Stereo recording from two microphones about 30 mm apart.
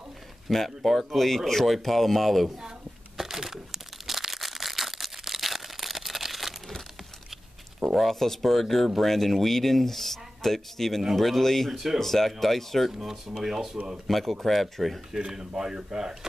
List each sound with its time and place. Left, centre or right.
0.5 s speech: centre
3.2 s a sound: centre
7.9 s speech: centre
12.9 s speech: centre
14.0 s speech: centre
15.1 s speech: right